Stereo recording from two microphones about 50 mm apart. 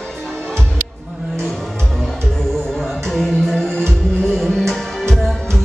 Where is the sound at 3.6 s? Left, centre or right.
Centre.